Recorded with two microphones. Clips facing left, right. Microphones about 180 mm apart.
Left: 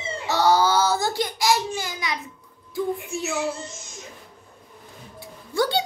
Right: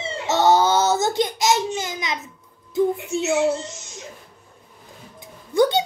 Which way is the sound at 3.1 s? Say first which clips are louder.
Right 9 dB; 25° right (ahead or behind).